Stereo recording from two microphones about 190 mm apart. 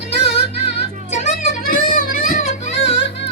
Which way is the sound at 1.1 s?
35° left (ahead or behind).